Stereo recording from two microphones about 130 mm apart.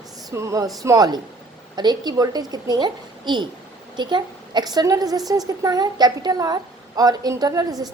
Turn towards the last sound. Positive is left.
turn(degrees=-30)  # may be behind; listen again after turning